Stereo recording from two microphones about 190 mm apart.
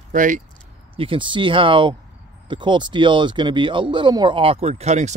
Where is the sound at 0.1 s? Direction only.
40° right (ahead or behind).